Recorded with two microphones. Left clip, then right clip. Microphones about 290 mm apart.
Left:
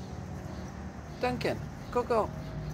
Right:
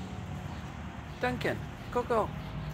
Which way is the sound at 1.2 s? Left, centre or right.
Centre.